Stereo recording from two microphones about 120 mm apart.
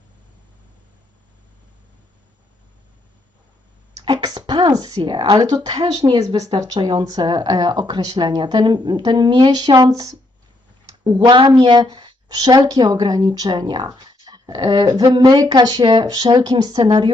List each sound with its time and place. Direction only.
4.0 s speech: 35° right (ahead or behind)
5.9 s speech: 50° right (ahead or behind)
6.8 s speech: 35° right (ahead or behind)